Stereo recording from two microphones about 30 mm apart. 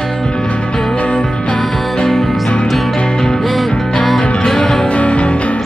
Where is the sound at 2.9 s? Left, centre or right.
Left.